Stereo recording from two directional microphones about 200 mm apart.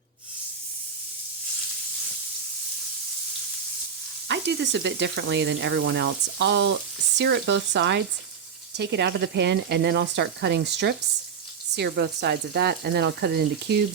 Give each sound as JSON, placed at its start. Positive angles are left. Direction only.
{"t": 4.3, "sound": "speech", "side_deg": -60}